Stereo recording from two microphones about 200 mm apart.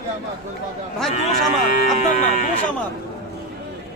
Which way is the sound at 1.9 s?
35° left (ahead or behind).